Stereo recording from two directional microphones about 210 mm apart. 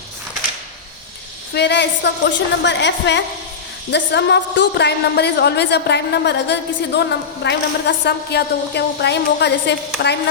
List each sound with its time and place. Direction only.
1.5 s a woman's voice: 55° left (ahead or behind)